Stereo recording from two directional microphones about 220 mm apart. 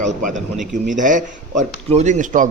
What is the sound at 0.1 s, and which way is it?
Speech, 35° right (ahead or behind).